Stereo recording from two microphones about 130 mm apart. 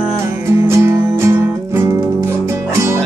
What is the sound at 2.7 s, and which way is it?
Music, 20° right (ahead or behind).